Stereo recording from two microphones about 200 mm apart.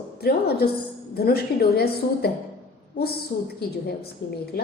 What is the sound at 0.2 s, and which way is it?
A woman's voice, 50° left (ahead or behind).